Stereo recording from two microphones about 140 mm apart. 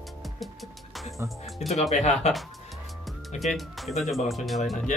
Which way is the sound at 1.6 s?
50° left (ahead or behind).